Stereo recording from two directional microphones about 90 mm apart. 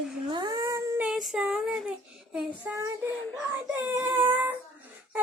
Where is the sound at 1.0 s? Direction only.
5° right (ahead or behind).